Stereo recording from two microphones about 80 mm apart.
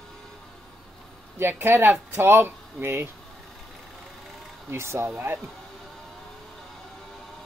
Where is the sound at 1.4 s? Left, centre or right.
Right.